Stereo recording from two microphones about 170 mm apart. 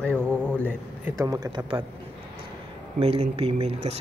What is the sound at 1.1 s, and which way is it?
Speech, 20° right (ahead or behind).